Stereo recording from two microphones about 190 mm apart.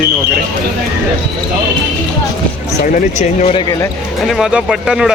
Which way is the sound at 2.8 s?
40° left (ahead or behind).